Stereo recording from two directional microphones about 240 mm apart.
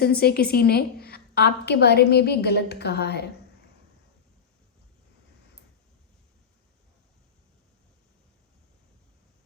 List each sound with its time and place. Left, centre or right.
0.0 s a woman's voice: left